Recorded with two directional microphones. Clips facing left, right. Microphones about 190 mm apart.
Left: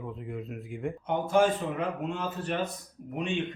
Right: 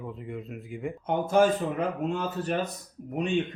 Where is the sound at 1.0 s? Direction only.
45° right (ahead or behind).